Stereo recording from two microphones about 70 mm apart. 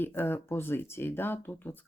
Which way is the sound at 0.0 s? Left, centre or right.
Left.